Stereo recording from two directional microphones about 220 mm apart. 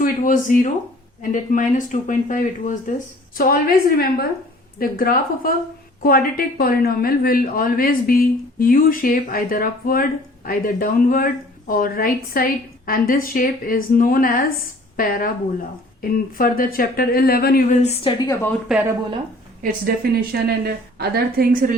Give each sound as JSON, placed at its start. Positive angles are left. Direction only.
{"t": 0.0, "sound": "a woman's voice", "side_deg": 35}
{"t": 17.8, "sound": "a woman's voice", "side_deg": 20}
{"t": 20.3, "sound": "a woman's voice", "side_deg": -45}